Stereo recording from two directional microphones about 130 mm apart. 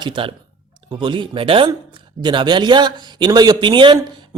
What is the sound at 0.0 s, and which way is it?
Speech, 40° right (ahead or behind).